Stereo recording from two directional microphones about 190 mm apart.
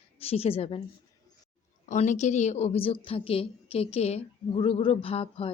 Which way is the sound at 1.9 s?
40° left (ahead or behind).